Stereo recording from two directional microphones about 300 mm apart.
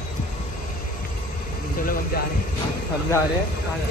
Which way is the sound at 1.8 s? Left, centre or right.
Left.